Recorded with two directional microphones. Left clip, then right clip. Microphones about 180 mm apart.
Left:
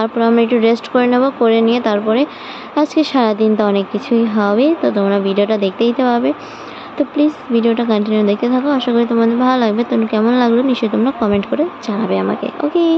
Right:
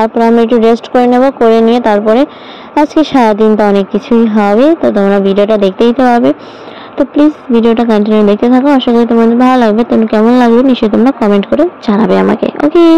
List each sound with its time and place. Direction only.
0.0 s a woman's voice: 30° right (ahead or behind)